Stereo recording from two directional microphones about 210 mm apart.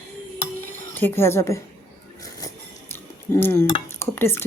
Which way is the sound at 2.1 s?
15° left (ahead or behind).